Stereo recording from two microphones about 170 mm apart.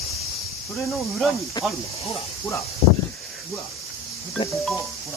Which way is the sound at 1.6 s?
25° left (ahead or behind).